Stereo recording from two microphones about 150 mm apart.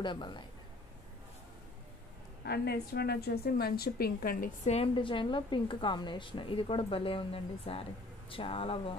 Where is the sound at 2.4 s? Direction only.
90° left.